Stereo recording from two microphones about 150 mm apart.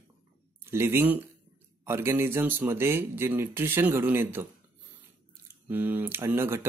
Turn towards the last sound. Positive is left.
turn(degrees=-15)  # may be behind; listen again after turning